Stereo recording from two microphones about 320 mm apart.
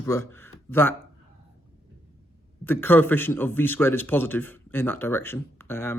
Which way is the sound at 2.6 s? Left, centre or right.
Centre.